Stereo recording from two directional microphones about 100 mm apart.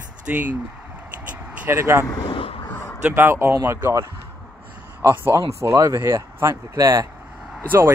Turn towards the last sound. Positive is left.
turn(degrees=-25)  # may be behind; listen again after turning